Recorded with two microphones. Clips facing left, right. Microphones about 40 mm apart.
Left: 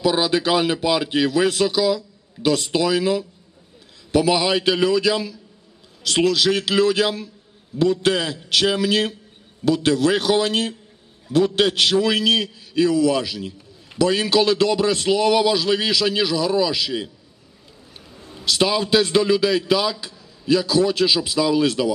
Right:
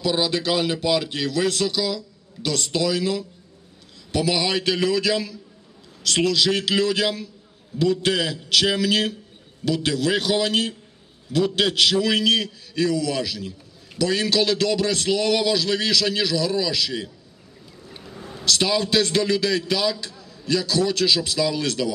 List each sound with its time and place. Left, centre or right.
0.0 s a man's voice: centre
18.4 s a man's voice: centre